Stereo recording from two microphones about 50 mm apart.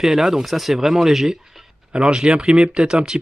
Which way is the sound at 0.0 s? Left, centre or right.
Centre.